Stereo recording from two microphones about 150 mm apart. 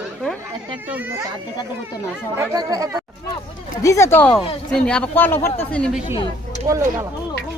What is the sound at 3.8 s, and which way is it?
Speech, 20° left (ahead or behind).